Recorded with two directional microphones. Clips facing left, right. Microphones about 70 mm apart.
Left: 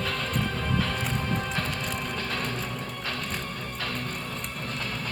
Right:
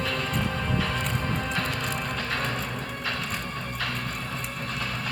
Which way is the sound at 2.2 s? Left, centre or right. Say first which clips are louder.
Right 2 dB; right.